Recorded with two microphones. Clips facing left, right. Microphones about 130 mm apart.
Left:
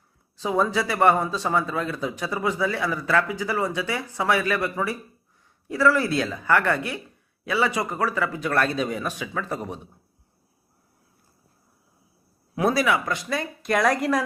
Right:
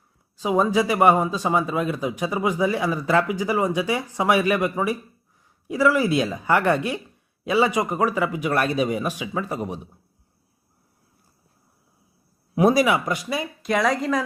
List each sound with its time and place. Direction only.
0.3 s speech: 15° right (ahead or behind)
12.5 s speech: 20° right (ahead or behind); by 14.3 s 5° left (ahead or behind)